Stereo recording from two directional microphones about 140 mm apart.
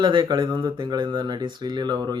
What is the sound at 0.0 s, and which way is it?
Speech, 35° right (ahead or behind).